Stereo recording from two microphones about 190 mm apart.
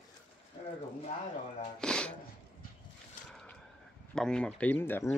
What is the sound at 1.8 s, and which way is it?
Speech, 5° left (ahead or behind).